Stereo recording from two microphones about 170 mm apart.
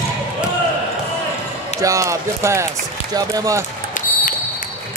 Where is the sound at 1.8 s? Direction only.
20° right (ahead or behind).